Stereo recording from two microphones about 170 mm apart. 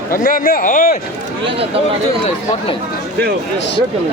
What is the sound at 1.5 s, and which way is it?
Speech, 35° right (ahead or behind).